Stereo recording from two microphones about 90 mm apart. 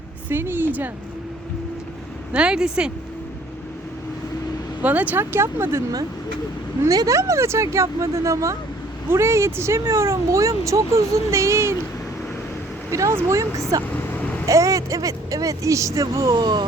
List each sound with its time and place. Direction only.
0.3 s speech: 25° right (ahead or behind)
2.3 s speech: 10° right (ahead or behind)
4.8 s speech: 20° right (ahead or behind)
6.8 s speech: 40° right (ahead or behind)
12.9 s speech: 35° right (ahead or behind)
13.9 s vehicle: 20° left (ahead or behind)
14.4 s speech: 35° right (ahead or behind)
16.3 s speech: 55° right (ahead or behind)